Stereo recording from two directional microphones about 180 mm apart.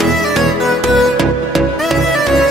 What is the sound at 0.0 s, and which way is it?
Music, centre (ahead or behind).